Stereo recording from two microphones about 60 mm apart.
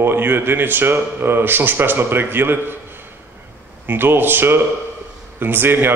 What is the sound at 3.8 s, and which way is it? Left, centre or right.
A man's voice, right.